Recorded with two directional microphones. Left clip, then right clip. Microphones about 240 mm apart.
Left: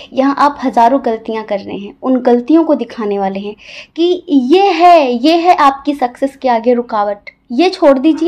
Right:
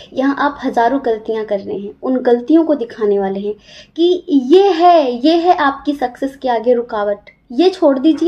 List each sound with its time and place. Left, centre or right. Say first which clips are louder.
0.1 s a woman's voice: left 5 dB; left